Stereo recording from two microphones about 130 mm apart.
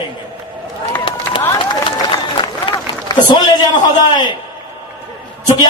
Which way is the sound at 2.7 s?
35° left (ahead or behind).